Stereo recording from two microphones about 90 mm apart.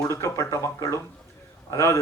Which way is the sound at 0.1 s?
35° left (ahead or behind).